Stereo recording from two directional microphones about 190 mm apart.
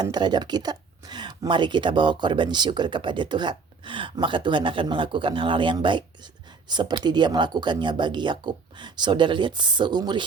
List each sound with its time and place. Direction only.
0.0 s speech: 20° right (ahead or behind)